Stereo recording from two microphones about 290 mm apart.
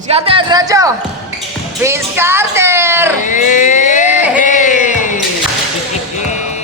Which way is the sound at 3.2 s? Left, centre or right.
Left.